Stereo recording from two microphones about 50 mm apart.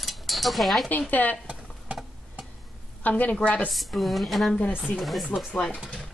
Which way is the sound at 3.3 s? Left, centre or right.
Left.